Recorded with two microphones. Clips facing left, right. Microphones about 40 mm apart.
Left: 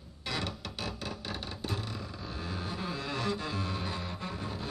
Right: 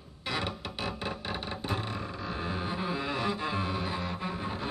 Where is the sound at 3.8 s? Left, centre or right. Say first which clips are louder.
Right 4 dB; centre.